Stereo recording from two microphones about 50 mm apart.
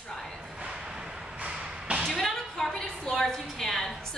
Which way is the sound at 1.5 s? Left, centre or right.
Right.